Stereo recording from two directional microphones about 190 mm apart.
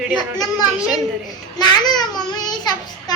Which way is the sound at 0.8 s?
Centre (ahead or behind).